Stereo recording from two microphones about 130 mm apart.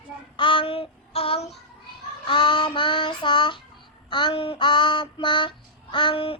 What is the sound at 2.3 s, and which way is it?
Child singing, 35° left (ahead or behind).